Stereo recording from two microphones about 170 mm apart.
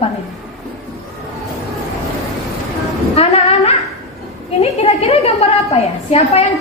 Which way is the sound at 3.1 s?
40° left (ahead or behind).